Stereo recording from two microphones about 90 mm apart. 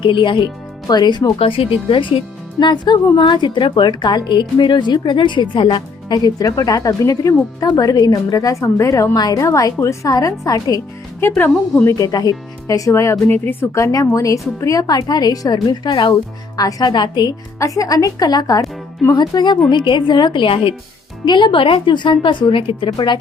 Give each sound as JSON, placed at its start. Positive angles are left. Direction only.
{"t": 0.0, "sound": "a woman's voice", "side_deg": 65}
{"t": 1.4, "sound": "speech", "side_deg": 90}
{"t": 7.7, "sound": "a woman's voice", "side_deg": 50}
{"t": 11.2, "sound": "speech", "side_deg": 25}
{"t": 11.9, "sound": "speech", "side_deg": 40}
{"t": 13.7, "sound": "a woman's voice", "side_deg": 35}
{"t": 16.6, "sound": "a woman's voice", "side_deg": 45}
{"t": 16.9, "sound": "speech", "side_deg": 55}
{"t": 17.6, "sound": "a woman's voice", "side_deg": 40}
{"t": 21.2, "sound": "speech", "side_deg": 60}
{"t": 22.9, "sound": "a woman's voice", "side_deg": 50}